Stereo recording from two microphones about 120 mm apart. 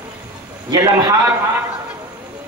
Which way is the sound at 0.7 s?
30° right (ahead or behind).